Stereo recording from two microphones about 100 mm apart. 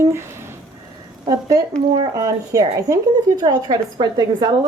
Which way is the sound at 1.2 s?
40° right (ahead or behind).